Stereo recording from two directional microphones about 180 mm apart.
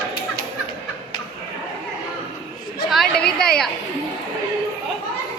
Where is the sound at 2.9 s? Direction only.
5° left (ahead or behind).